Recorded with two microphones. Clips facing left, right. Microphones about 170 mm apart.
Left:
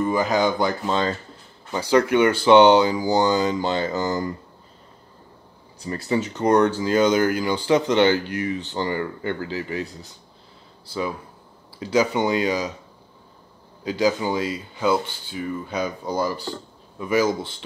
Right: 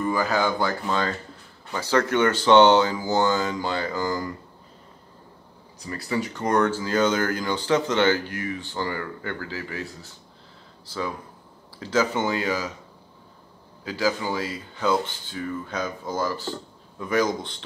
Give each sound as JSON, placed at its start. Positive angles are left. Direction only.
{"t": 0.0, "sound": "speech", "side_deg": 20}
{"t": 5.9, "sound": "speech", "side_deg": 25}
{"t": 13.8, "sound": "speech", "side_deg": 20}